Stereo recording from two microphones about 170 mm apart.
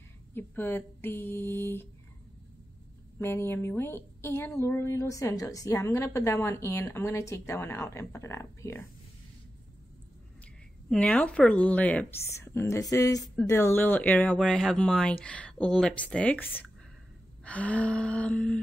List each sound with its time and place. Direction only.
0.3 s a woman's voice: 10° left (ahead or behind)
3.2 s a woman's voice: 15° left (ahead or behind)
10.9 s a woman's voice: 5° left (ahead or behind)